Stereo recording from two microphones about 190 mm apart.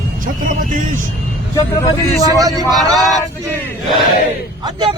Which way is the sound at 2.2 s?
20° right (ahead or behind).